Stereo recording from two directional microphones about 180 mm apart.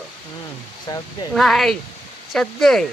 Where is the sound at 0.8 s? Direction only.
20° left (ahead or behind).